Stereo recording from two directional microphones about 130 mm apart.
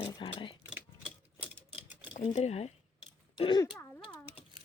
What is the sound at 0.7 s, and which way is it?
Typewriter, 10° right (ahead or behind).